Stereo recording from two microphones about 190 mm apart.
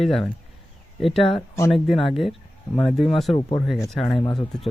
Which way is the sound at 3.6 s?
90° right.